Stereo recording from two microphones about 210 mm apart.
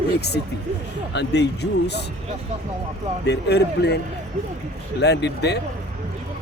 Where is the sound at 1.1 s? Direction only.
55° left (ahead or behind).